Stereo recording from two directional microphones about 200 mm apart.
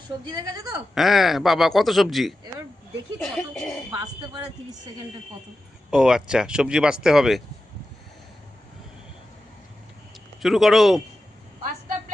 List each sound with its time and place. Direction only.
0.3 s speech: 20° right (ahead or behind)
0.9 s speech: centre (ahead or behind)
3.9 s speech: 20° right (ahead or behind)
5.9 s speech: 5° right (ahead or behind)
10.4 s speech: centre (ahead or behind)